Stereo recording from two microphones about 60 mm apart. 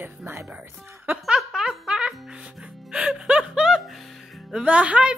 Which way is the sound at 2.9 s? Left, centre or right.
Centre.